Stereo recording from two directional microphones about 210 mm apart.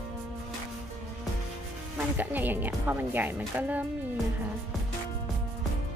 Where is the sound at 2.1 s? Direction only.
10° right (ahead or behind).